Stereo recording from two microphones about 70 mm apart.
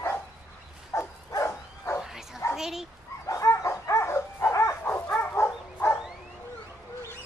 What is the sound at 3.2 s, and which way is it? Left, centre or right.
Bow-wow, left.